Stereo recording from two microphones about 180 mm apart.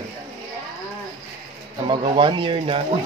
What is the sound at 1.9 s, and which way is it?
Speech, 25° right (ahead or behind).